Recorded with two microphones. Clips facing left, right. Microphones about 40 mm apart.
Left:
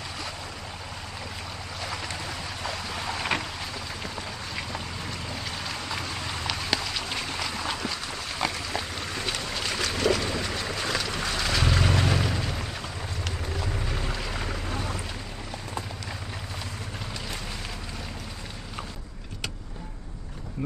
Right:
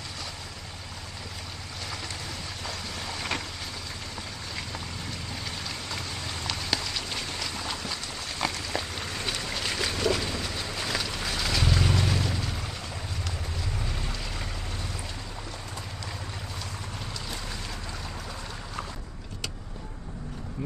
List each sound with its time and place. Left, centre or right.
1.9 s boat: centre
4.6 s vehicle: centre
7.9 s a sound: centre
10.3 s boat: centre
11.2 s wild animals: centre
11.6 s boat: centre
13.9 s boat: centre